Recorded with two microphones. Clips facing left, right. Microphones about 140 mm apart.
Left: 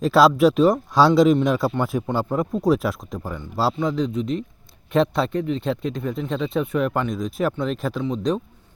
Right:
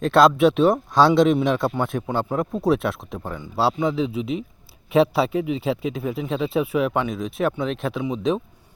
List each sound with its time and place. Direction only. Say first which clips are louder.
0.0 s speech: even; centre (ahead or behind)